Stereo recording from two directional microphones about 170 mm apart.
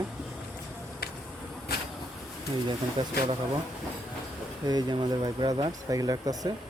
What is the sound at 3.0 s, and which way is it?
Speech, 25° right (ahead or behind).